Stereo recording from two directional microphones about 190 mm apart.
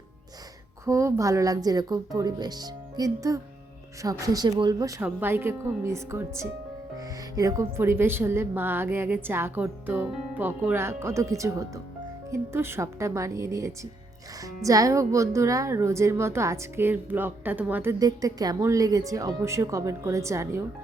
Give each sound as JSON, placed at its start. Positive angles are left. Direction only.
{"t": 0.9, "sound": "a woman's voice", "side_deg": -15}